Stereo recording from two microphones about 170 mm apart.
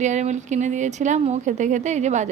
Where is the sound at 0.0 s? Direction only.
45° right (ahead or behind).